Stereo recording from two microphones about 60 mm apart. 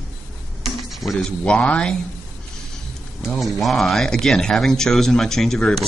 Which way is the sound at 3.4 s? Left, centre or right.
Centre.